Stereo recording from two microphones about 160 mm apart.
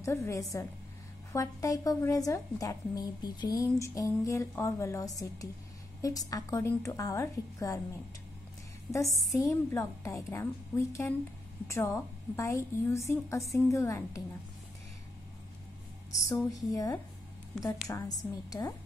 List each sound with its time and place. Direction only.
0.0 s a woman's voice: 20° left (ahead or behind)
9.1 s a woman's voice: 20° left (ahead or behind)
16.7 s a woman's voice: 20° left (ahead or behind)